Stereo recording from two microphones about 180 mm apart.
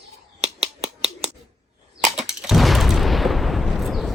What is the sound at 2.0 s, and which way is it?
Gunshot, 5° right (ahead or behind).